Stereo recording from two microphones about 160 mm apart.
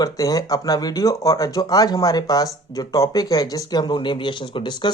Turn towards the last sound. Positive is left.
turn(degrees=30)  # may be behind; listen again after turning